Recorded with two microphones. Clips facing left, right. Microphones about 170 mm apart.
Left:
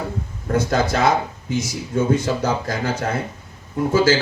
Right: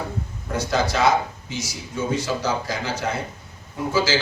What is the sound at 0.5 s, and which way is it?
A man's voice, 50° left (ahead or behind).